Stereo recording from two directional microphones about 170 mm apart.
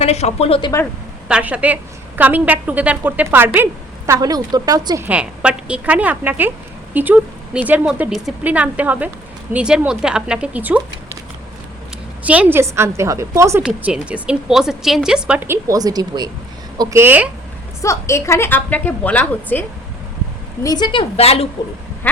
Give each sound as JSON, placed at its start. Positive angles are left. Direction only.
{"t": 0.0, "sound": "a woman's voice", "side_deg": 40}
{"t": 1.3, "sound": "a woman's voice", "side_deg": -10}
{"t": 5.0, "sound": "a woman's voice", "side_deg": -5}
{"t": 12.2, "sound": "a woman's voice", "side_deg": -10}
{"t": 13.6, "sound": "a woman's voice", "side_deg": -5}
{"t": 17.8, "sound": "a woman's voice", "side_deg": 15}
{"t": 20.7, "sound": "a woman's voice", "side_deg": 25}
{"t": 22.0, "sound": "a sound", "side_deg": 10}